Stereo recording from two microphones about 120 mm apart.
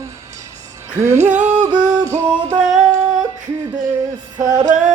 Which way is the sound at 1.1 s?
75° right (ahead or behind).